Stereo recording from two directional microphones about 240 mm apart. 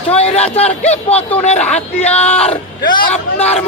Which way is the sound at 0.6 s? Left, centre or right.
Left.